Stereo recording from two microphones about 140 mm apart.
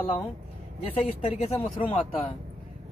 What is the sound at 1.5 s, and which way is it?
Speech, 40° left (ahead or behind).